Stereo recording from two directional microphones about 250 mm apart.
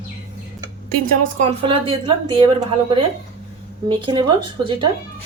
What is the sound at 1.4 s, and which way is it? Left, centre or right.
A woman's voice, right.